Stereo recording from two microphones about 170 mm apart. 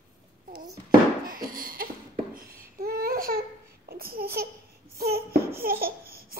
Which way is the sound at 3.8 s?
60° right (ahead or behind).